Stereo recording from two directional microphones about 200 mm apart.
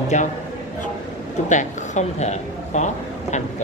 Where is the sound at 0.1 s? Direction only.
35° left (ahead or behind).